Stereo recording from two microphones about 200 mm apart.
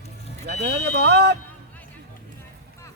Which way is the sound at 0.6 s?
55° right (ahead or behind).